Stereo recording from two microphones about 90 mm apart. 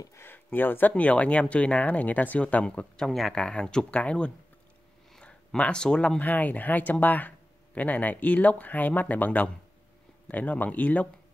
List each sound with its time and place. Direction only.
0.2 s speech: 20° left (ahead or behind)